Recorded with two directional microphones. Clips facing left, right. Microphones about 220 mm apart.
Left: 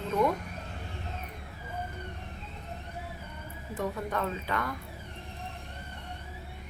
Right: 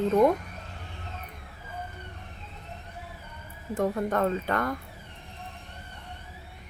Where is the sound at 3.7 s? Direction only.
50° right (ahead or behind).